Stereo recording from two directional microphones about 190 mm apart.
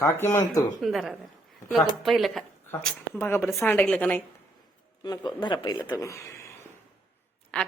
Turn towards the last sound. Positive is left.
turn(degrees=5)  # may be behind; listen again after turning